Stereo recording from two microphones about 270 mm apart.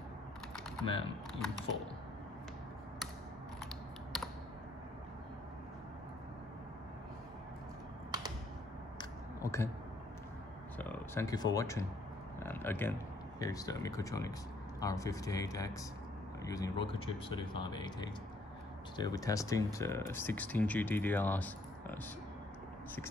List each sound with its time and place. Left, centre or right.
0.8 s speech: centre
9.4 s speech: centre
10.8 s speech: centre